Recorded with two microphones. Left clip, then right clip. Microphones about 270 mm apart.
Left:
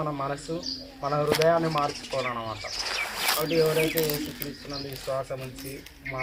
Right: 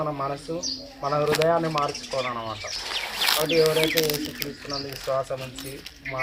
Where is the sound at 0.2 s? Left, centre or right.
Centre.